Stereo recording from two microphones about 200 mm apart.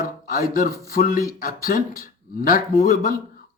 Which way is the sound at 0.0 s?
45° left (ahead or behind).